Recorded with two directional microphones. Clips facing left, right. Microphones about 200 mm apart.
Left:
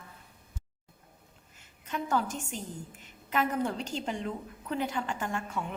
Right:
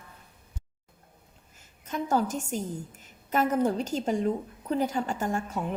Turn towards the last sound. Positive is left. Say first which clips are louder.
# right 5 dB
turn(degrees=-40)  # may be behind; listen again after turning